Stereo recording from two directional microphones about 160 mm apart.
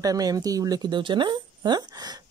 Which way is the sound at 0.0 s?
20° right (ahead or behind).